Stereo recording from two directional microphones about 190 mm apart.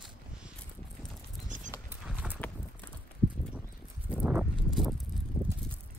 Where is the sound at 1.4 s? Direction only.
40° right (ahead or behind).